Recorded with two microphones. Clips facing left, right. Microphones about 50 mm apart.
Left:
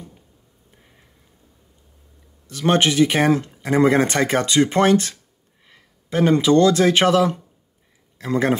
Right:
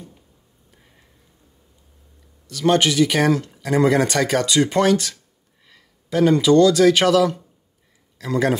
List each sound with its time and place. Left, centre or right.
2.4 s speech: left